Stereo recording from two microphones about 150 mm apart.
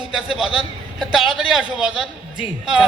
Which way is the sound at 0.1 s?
5° right (ahead or behind).